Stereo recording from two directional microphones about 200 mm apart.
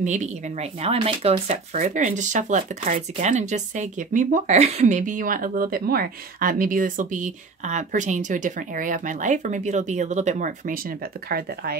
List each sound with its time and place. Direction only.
0.0 s speech: 35° right (ahead or behind)
11.2 s speech: 50° right (ahead or behind)